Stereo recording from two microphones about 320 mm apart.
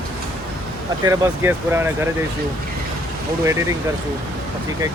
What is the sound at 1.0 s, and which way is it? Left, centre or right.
Speech, centre.